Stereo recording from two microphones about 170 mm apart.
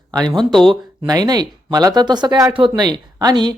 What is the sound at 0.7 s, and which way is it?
Speech, 25° right (ahead or behind).